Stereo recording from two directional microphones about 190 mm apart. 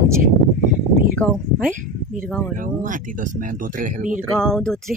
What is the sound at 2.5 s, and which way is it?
Speech, 45° right (ahead or behind).